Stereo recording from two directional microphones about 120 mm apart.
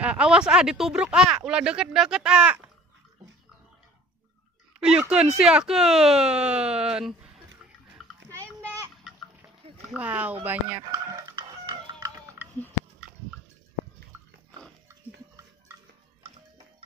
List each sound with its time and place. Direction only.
0.0 s speech: 10° right (ahead or behind)
4.7 s speech: 5° right (ahead or behind)
9.8 s speech: 10° right (ahead or behind)
10.9 s chicken: 35° right (ahead or behind)
11.6 s a sound: 40° right (ahead or behind)